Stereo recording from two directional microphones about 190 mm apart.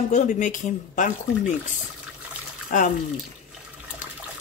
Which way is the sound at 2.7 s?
40° left (ahead or behind).